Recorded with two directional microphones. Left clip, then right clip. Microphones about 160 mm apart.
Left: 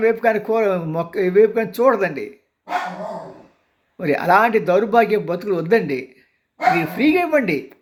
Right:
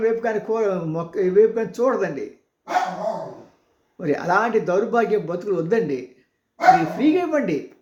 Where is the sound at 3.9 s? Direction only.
25° left (ahead or behind).